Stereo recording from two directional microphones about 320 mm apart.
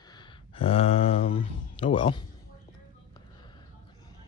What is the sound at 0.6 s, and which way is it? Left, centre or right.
Speech, centre.